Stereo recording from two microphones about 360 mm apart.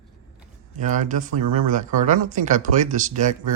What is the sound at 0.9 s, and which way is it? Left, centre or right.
Speech, right.